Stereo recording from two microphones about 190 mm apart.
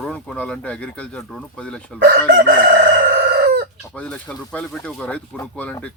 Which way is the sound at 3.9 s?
5° left (ahead or behind).